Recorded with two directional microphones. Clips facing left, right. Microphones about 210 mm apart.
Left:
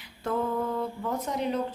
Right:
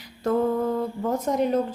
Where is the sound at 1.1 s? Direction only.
45° right (ahead or behind).